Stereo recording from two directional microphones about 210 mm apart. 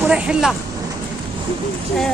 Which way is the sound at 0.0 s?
5° right (ahead or behind).